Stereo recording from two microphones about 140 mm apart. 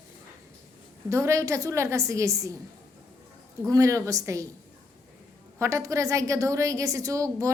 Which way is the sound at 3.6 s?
20° right (ahead or behind).